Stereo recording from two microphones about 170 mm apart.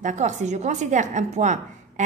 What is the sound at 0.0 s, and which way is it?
A woman's voice, 45° right (ahead or behind).